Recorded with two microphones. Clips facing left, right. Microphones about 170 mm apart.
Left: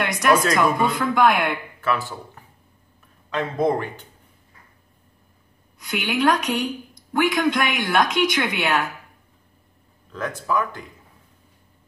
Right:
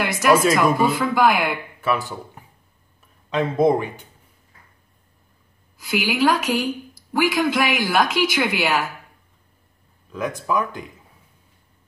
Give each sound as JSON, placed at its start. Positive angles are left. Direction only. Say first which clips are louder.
{"t": 0.0, "sound": "a woman's voice", "louder": "right 2 dB", "side_deg": -5}
{"t": 1.8, "sound": "speech", "louder": "right 3 dB", "side_deg": -15}
{"t": 5.8, "sound": "a woman's voice", "louder": "right 2 dB", "side_deg": -5}
{"t": 10.1, "sound": "speech", "louder": "right 1 dB", "side_deg": -15}